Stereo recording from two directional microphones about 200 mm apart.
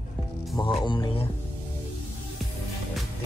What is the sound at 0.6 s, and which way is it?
Speech, 25° left (ahead or behind).